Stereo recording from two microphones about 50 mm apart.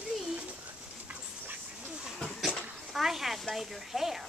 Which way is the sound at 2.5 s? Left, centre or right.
Centre.